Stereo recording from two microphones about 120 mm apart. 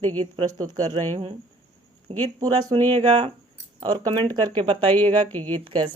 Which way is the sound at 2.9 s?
55° right (ahead or behind).